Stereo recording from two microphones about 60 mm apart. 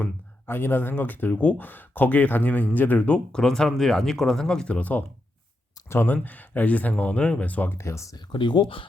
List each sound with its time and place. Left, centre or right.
0.4 s speech: left
3.3 s speech: centre
4.7 s speech: left
5.9 s speech: left
7.7 s speech: left